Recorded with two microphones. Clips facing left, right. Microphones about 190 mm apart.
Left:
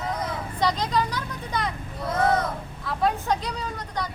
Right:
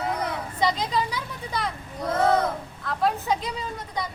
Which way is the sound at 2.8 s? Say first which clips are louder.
Even; centre (ahead or behind).